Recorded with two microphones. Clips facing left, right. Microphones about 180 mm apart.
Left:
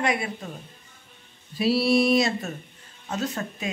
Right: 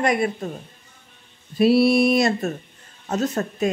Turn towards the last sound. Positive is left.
turn(degrees=-45)  # may be behind; listen again after turning